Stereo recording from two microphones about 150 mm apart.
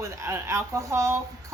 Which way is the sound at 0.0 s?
20° right (ahead or behind).